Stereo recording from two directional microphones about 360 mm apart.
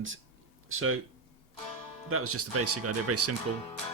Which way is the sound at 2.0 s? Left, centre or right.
Right.